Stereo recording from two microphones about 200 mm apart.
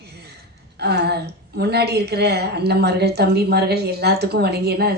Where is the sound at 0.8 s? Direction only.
55° right (ahead or behind).